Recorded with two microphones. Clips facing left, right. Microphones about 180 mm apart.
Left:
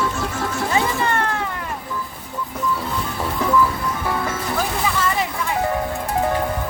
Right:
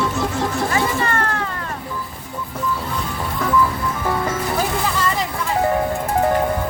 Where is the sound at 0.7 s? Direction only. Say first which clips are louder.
Left 3 dB; 15° left (ahead or behind).